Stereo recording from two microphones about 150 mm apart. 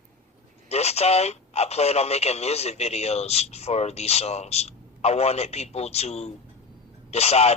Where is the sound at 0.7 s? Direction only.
45° left (ahead or behind).